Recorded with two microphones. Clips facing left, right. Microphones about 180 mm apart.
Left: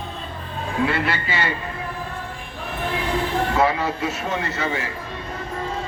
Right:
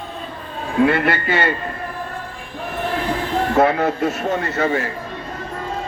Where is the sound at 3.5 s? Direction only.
55° right (ahead or behind).